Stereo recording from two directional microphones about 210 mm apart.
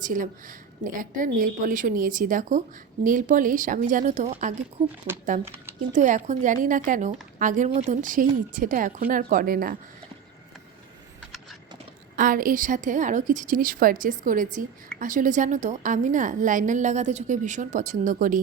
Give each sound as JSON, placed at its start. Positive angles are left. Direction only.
{"t": 0.0, "sound": "a woman's voice", "side_deg": -40}
{"t": 5.9, "sound": "a woman's voice", "side_deg": -35}
{"t": 12.1, "sound": "a woman's voice", "side_deg": -40}